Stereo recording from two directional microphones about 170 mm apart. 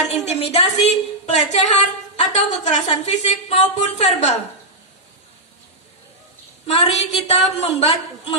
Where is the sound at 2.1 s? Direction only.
40° left (ahead or behind).